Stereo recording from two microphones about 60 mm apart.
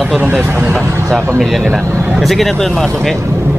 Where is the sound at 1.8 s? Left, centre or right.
Right.